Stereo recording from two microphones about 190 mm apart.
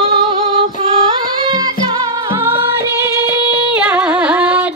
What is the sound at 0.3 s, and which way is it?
Female singing, 25° right (ahead or behind).